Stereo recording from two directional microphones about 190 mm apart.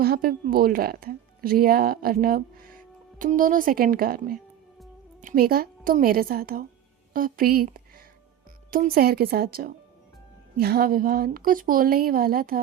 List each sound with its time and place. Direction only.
0.0 s a woman's voice: 50° right (ahead or behind)